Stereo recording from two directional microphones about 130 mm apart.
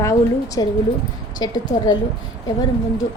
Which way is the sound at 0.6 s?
30° left (ahead or behind).